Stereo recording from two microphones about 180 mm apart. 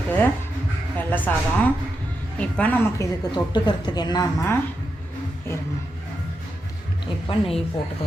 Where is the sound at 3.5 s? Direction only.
25° left (ahead or behind).